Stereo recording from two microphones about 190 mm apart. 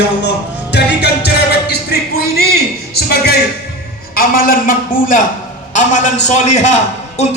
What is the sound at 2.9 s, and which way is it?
A woman's voice, 55° left (ahead or behind).